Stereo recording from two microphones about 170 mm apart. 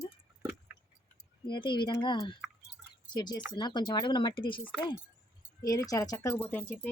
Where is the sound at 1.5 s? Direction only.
30° left (ahead or behind).